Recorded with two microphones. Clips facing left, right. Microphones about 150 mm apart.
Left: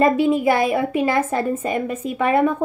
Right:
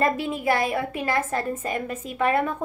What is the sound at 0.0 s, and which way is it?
A woman's voice, 5° left (ahead or behind).